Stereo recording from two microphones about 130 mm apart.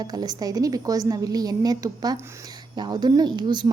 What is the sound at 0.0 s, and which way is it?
A woman's voice, 30° right (ahead or behind).